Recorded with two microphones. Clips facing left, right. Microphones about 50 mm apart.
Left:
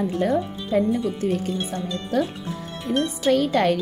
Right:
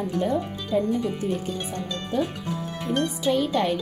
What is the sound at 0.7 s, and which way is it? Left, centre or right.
Speech, left.